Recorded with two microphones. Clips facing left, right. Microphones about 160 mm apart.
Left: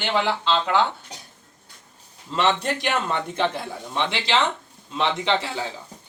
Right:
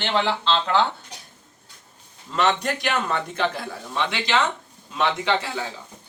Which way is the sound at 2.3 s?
25° left (ahead or behind).